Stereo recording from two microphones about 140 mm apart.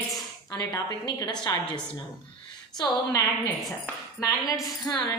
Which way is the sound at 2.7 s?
30° left (ahead or behind).